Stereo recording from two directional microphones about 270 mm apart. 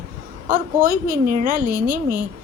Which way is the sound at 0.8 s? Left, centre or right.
Right.